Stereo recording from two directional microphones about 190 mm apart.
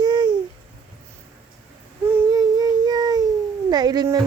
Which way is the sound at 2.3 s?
20° right (ahead or behind).